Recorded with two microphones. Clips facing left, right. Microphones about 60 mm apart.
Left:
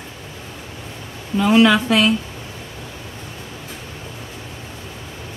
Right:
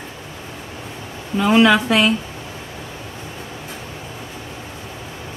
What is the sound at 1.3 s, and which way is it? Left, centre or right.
Speech, centre.